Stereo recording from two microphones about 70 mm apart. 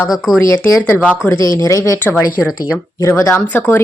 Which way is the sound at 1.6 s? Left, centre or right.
Left.